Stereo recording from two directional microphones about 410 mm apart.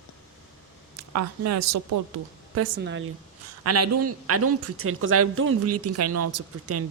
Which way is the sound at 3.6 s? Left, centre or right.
Right.